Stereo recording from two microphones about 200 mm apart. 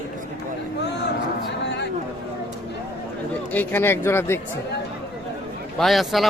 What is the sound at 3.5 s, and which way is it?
Speech, 10° left (ahead or behind).